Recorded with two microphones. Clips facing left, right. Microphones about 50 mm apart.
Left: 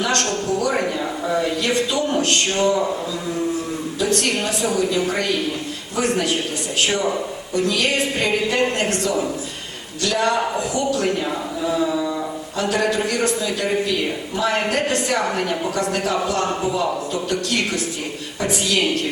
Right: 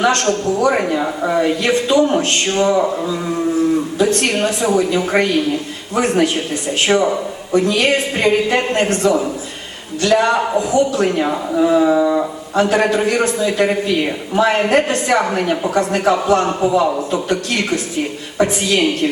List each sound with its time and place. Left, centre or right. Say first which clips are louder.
0.0 s a man's voice: right 6 dB; right
3.9 s a man's voice: right 5 dB; right